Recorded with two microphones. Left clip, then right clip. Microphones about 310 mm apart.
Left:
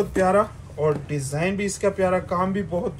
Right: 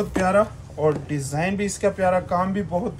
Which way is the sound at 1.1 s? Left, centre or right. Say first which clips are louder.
Even; left.